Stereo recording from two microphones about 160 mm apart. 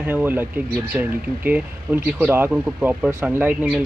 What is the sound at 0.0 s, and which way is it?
Speech, 10° right (ahead or behind).